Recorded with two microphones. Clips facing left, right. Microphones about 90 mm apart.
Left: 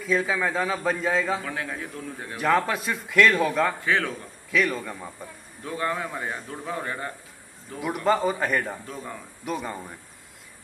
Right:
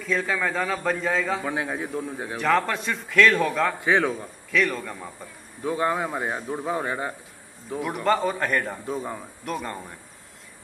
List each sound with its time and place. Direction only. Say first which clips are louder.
0.0 s a man's voice: left 1 dB; 5° left (ahead or behind)
1.4 s a man's voice: right 4 dB; 20° right (ahead or behind)
2.3 s a man's voice: even; 5° left (ahead or behind)
3.8 s a man's voice: right 3 dB; 20° right (ahead or behind)
4.5 s a man's voice: even; centre (ahead or behind)
5.6 s a man's voice: right 4 dB; 20° right (ahead or behind)
7.8 s a man's voice: even; centre (ahead or behind)
8.8 s a man's voice: right 6 dB; 20° right (ahead or behind)
9.4 s a man's voice: left 2 dB; 5° left (ahead or behind)